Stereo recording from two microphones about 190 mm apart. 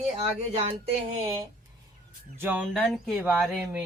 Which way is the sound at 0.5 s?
35° right (ahead or behind).